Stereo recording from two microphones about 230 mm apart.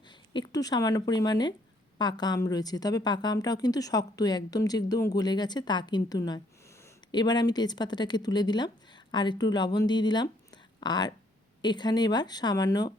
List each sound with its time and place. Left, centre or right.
0.3 s a woman's voice: centre